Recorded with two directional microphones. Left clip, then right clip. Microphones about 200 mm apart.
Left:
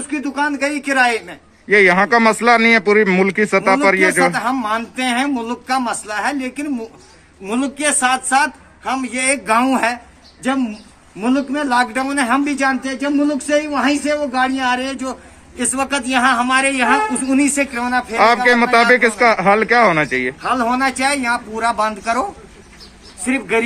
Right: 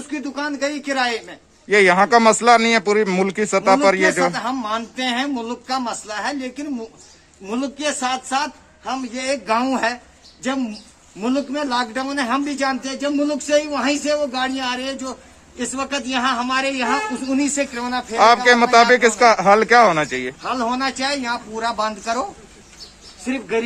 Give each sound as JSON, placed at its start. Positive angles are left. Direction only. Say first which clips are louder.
{"t": 0.1, "sound": "a man's voice", "louder": "left 6 dB", "side_deg": 0}